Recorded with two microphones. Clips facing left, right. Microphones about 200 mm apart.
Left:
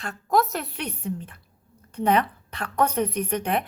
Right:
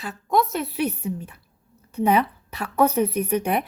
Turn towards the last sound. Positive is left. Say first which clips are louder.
# right 3 dB
turn(degrees=-10)  # may be behind; listen again after turning